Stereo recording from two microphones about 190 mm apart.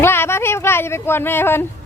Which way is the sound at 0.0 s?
10° left (ahead or behind).